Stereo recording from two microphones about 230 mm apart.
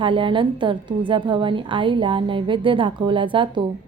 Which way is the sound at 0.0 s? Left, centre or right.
Right.